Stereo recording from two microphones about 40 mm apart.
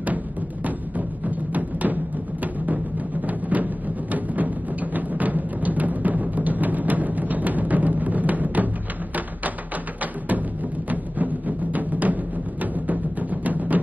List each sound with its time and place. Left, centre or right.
0.7 s music: right
10.9 s music: right